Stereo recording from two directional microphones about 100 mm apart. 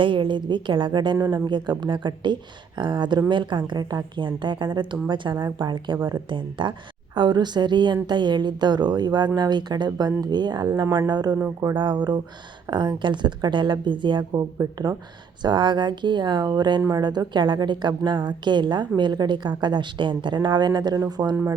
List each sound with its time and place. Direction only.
0.0 s a woman's voice: 55° right (ahead or behind)